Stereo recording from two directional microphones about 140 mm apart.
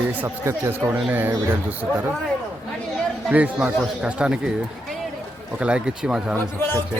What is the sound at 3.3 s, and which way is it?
Speech, 10° right (ahead or behind).